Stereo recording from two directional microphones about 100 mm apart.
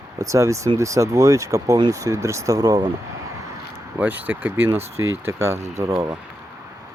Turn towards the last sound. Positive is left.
turn(degrees=-35)  # may be behind; listen again after turning